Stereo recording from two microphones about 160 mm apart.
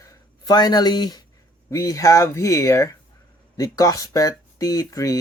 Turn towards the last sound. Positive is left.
turn(degrees=20)  # may be behind; listen again after turning